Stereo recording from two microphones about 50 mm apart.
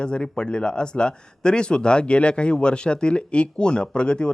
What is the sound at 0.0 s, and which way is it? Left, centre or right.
Speech, centre.